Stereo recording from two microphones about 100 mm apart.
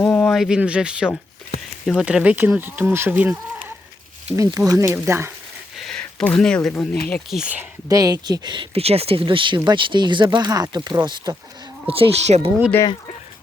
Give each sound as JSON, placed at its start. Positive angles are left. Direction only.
{"t": 0.3, "sound": "speech", "side_deg": -5}
{"t": 4.4, "sound": "speech", "side_deg": -35}
{"t": 4.9, "sound": "speech", "side_deg": -25}
{"t": 5.7, "sound": "a sound", "side_deg": 5}
{"t": 6.7, "sound": "speech", "side_deg": 15}
{"t": 7.3, "sound": "speech", "side_deg": -5}
{"t": 7.9, "sound": "speech", "side_deg": -40}
{"t": 8.7, "sound": "speech", "side_deg": -85}
{"t": 11.9, "sound": "speech", "side_deg": -70}